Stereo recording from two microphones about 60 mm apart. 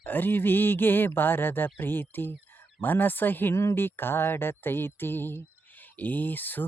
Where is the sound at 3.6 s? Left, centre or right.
Left.